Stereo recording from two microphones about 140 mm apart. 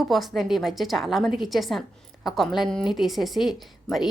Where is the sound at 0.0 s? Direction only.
Centre (ahead or behind).